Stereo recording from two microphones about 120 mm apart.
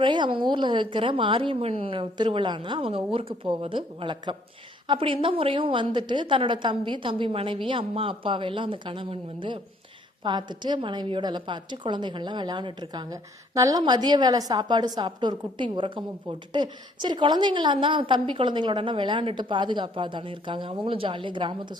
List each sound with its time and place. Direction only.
0.0 s a woman's voice: 40° right (ahead or behind)